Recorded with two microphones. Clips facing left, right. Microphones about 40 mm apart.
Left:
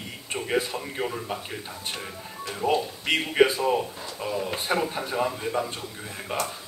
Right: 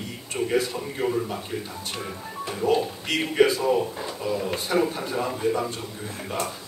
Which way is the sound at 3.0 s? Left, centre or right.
Centre.